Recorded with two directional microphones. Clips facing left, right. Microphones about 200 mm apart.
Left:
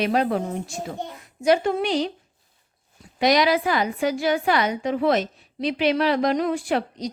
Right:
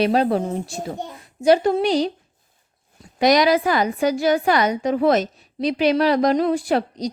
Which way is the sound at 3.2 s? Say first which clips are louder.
Right 3 dB; 45° right (ahead or behind).